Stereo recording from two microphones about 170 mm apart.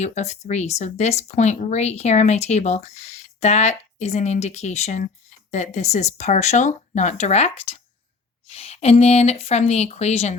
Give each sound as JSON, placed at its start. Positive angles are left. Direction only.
{"t": 0.0, "sound": "speech", "side_deg": 40}